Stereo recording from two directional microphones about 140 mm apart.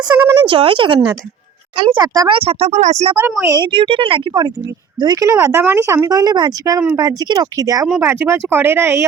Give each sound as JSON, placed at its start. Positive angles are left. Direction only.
{"t": 0.0, "sound": "speech", "side_deg": -25}
{"t": 0.4, "sound": "speech", "side_deg": -35}
{"t": 3.6, "sound": "speech", "side_deg": -40}